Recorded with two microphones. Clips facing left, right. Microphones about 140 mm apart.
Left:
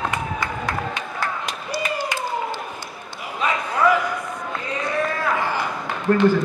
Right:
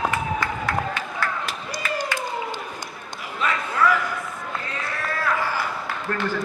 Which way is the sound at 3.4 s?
20° left (ahead or behind).